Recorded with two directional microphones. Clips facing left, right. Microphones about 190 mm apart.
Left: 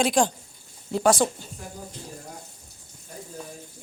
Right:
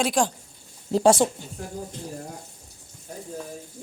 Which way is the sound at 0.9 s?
30° right (ahead or behind).